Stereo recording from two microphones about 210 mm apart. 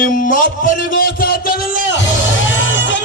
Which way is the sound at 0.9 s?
45° left (ahead or behind).